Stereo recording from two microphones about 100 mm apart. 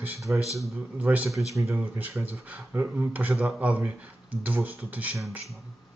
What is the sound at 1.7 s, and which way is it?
Speech, 15° right (ahead or behind).